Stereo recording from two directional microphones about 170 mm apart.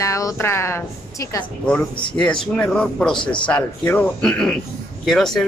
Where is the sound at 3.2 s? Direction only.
30° left (ahead or behind).